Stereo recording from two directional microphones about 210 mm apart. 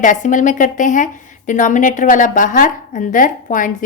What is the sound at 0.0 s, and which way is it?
A woman's voice, 40° left (ahead or behind).